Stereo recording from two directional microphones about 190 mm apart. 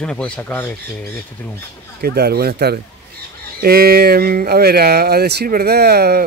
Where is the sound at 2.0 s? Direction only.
55° right (ahead or behind).